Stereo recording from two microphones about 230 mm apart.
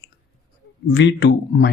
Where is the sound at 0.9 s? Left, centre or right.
Left.